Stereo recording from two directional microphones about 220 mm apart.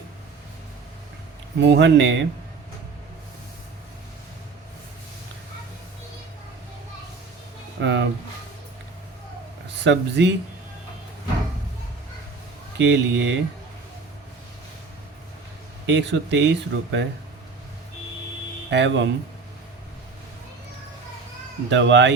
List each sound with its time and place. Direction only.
1.5 s speech: 50° right (ahead or behind)
7.8 s speech: 55° right (ahead or behind)
9.7 s speech: 55° right (ahead or behind)
12.8 s speech: 55° right (ahead or behind)
15.9 s speech: 55° right (ahead or behind)
18.7 s speech: 55° right (ahead or behind)
21.7 s speech: 55° right (ahead or behind)